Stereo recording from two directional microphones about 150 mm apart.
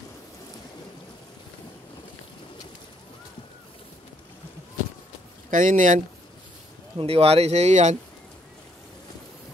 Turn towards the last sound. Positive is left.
turn(degrees=-50)  # may be behind; listen again after turning